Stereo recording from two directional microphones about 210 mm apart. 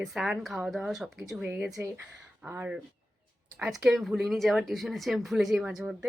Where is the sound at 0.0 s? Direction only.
Centre (ahead or behind).